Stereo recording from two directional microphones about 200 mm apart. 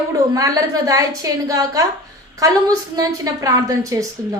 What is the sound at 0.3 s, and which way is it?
A woman's voice, 15° right (ahead or behind).